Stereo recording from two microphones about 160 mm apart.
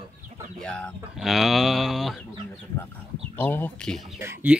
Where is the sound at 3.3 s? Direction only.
10° left (ahead or behind).